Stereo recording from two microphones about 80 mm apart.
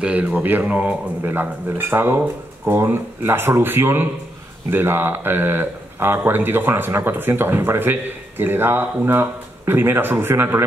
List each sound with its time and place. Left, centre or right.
0.0 s speech: centre